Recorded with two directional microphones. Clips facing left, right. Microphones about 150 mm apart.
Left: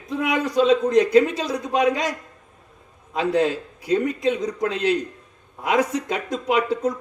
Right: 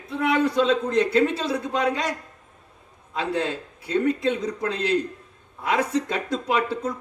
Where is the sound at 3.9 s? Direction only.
15° left (ahead or behind).